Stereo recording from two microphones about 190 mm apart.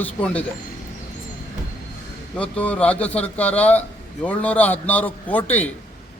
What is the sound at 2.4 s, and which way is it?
Speech, 5° left (ahead or behind).